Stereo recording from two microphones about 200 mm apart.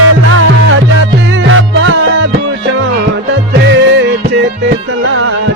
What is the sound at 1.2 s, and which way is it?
Music, 75° right (ahead or behind).